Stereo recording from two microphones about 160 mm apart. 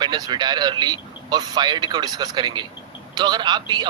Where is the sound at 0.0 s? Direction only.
25° right (ahead or behind).